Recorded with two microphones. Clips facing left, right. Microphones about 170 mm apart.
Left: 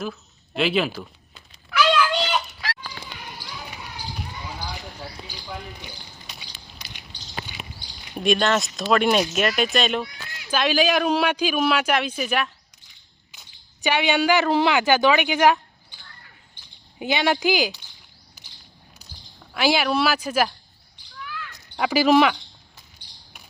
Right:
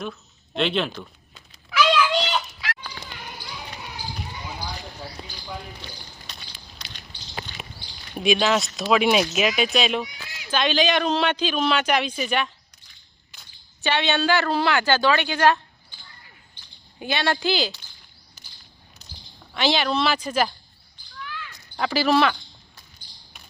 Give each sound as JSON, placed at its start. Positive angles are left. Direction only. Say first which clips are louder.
{"t": 0.0, "sound": "speech", "louder": "left 2 dB", "side_deg": 5}
{"t": 1.8, "sound": "cat", "louder": "even", "side_deg": 0}
{"t": 2.6, "sound": "goat", "louder": "left 1 dB", "side_deg": 45}
{"t": 5.8, "sound": "a sound", "louder": "even", "side_deg": 10}
{"t": 8.1, "sound": "speech", "louder": "even", "side_deg": 0}
{"t": 13.8, "sound": "speech", "louder": "left 2 dB", "side_deg": 10}
{"t": 17.0, "sound": "speech", "louder": "left 3 dB", "side_deg": 15}
{"t": 19.5, "sound": "speech", "louder": "left 2 dB", "side_deg": 10}
{"t": 21.2, "sound": "basketball bounce", "louder": "left 1 dB", "side_deg": 0}
{"t": 21.8, "sound": "speech", "louder": "left 3 dB", "side_deg": 15}